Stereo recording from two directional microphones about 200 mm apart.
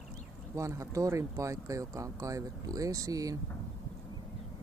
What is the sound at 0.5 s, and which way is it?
Speech, 15° right (ahead or behind).